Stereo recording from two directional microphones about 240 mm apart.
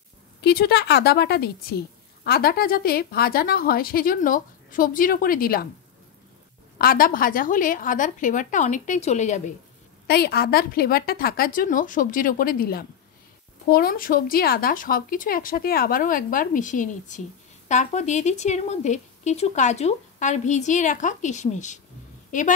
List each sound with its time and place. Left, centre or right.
0.4 s a woman's voice: left
6.8 s a woman's voice: left
10.0 s a woman's voice: left